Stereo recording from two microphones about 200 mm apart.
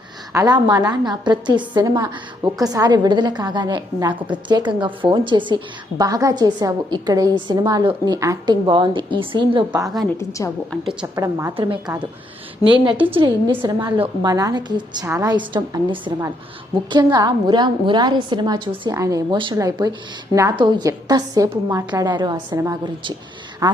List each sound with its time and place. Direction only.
0.3 s a woman's voice: 20° right (ahead or behind)
10.2 s a woman's voice: 15° left (ahead or behind)
11.0 s a woman's voice: 15° right (ahead or behind)
11.5 s a woman's voice: 25° right (ahead or behind)